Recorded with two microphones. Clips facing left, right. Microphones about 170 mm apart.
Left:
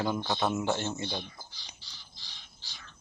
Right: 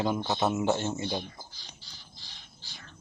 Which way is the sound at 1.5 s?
50° right (ahead or behind).